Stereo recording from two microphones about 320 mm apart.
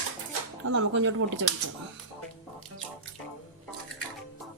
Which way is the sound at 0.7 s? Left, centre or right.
Right.